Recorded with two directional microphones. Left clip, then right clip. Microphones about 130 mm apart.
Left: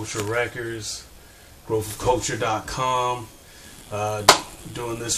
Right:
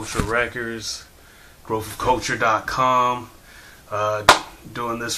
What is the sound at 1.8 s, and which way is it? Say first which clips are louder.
Speech: right 1 dB; 20° left (ahead or behind).